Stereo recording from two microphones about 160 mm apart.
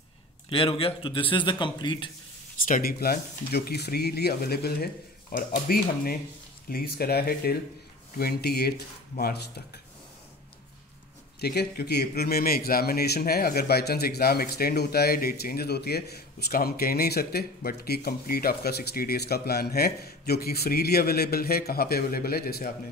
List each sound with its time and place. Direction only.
0.5 s a man's voice: 35° left (ahead or behind)
2.6 s a man's voice: 65° left (ahead or behind)
5.3 s a man's voice: 65° left (ahead or behind)
11.4 s a man's voice: 85° left